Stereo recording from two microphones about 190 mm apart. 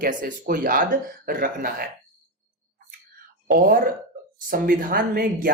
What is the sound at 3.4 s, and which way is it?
Speech, 50° right (ahead or behind).